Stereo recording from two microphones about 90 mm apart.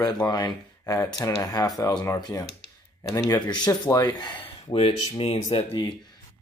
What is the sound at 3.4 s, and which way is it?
Speech, 50° left (ahead or behind).